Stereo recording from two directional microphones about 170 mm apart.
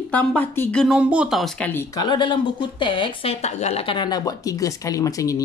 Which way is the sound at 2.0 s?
25° left (ahead or behind).